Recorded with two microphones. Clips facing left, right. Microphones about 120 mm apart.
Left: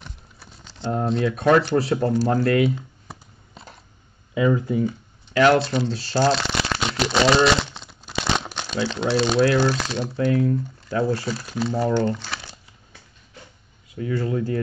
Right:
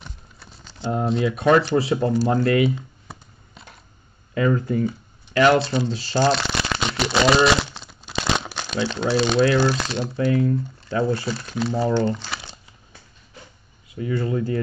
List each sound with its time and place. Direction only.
0.4 s speech: centre (ahead or behind)
3.6 s a sound: 30° left (ahead or behind)
4.3 s speech: 10° left (ahead or behind)
4.8 s speech: centre (ahead or behind)
12.4 s crumpling: 25° right (ahead or behind)
13.9 s speech: centre (ahead or behind)